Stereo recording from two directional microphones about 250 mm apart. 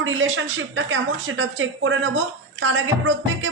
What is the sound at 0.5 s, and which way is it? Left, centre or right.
Speech, right.